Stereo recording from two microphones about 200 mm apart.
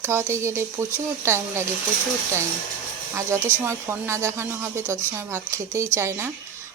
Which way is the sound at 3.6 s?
10° right (ahead or behind).